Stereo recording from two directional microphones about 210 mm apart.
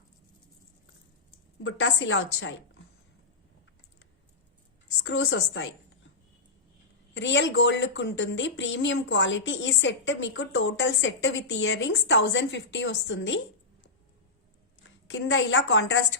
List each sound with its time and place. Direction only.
1.6 s speech: 60° left (ahead or behind)
5.0 s a woman's voice: 65° left (ahead or behind)
7.1 s speech: 60° left (ahead or behind)
14.8 s a woman's voice: 75° left (ahead or behind)